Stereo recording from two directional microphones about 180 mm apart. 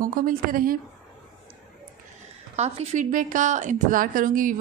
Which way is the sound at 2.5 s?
35° right (ahead or behind).